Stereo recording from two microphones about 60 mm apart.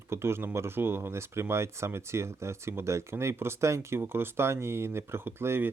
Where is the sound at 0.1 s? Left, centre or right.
Right.